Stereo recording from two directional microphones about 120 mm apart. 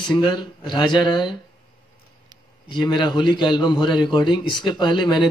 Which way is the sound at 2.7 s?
40° left (ahead or behind).